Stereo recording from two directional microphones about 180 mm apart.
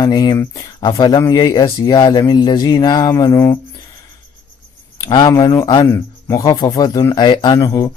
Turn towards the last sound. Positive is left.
turn(degrees=20)  # may be behind; listen again after turning